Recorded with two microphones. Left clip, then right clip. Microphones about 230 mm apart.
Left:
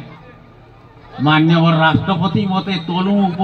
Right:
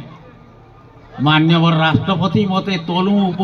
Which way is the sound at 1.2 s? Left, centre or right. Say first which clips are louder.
Even; right.